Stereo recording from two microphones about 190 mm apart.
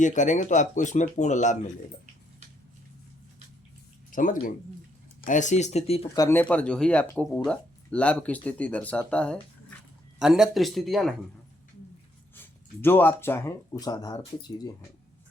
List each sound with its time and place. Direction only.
0.0 s speech: 40° left (ahead or behind)
4.1 s speech: 45° left (ahead or behind)
6.1 s speech: 10° left (ahead or behind)
12.4 s speech: 10° left (ahead or behind)